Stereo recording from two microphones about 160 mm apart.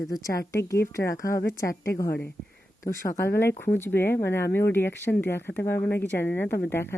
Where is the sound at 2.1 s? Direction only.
90° left.